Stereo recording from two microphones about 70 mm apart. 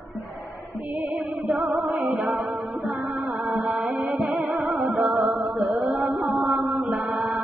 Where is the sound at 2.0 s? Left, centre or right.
Right.